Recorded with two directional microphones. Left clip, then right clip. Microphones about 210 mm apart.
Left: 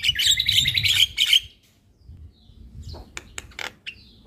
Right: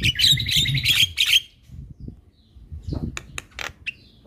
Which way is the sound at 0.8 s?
25° right (ahead or behind).